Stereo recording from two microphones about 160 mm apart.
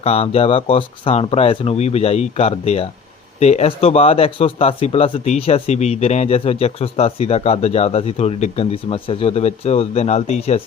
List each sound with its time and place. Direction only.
0.0 s speech: 40° left (ahead or behind)